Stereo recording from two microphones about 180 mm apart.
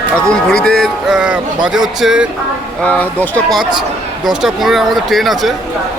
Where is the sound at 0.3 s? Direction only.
5° left (ahead or behind).